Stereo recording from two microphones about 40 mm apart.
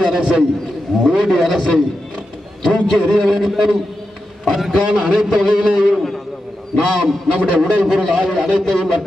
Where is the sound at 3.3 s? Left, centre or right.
Centre.